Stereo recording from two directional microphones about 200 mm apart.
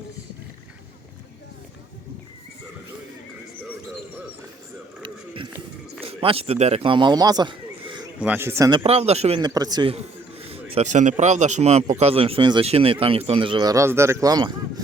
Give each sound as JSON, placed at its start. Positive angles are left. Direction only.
{"t": 5.0, "sound": "speech", "side_deg": -25}
{"t": 8.2, "sound": "a man's voice", "side_deg": -10}
{"t": 8.8, "sound": "a man's voice", "side_deg": -30}
{"t": 9.4, "sound": "a man's voice", "side_deg": -20}